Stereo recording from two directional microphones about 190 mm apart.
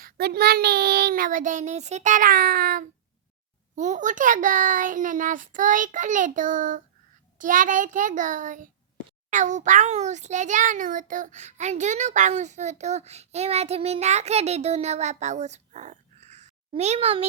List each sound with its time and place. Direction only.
0.0 s a child's voice: 55° right (ahead or behind); by 17.2 s 30° right (ahead or behind)